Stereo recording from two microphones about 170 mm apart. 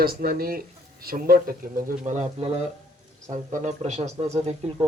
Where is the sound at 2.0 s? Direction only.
45° right (ahead or behind).